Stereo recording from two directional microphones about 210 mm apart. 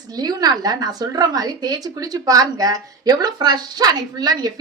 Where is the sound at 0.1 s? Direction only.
20° right (ahead or behind).